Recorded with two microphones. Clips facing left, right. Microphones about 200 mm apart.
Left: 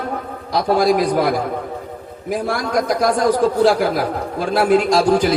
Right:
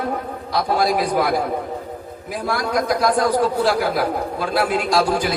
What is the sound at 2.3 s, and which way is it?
Music, 50° left (ahead or behind).